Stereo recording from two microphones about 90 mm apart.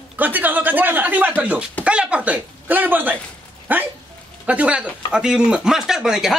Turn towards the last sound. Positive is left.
turn(degrees=-5)  # may be behind; listen again after turning